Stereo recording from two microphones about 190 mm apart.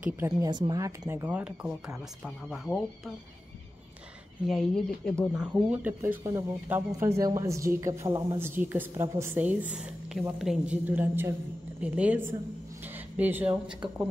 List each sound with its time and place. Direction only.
0.0 s speech: 15° right (ahead or behind)
1.0 s speech: 10° right (ahead or behind)
4.5 s speech: 5° left (ahead or behind)